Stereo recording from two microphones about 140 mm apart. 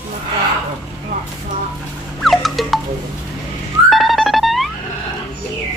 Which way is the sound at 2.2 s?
Centre (ahead or behind).